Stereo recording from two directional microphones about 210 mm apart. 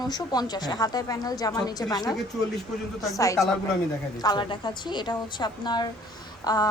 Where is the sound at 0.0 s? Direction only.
20° left (ahead or behind).